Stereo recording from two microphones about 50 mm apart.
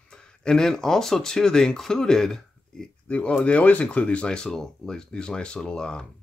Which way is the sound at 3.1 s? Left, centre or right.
Left.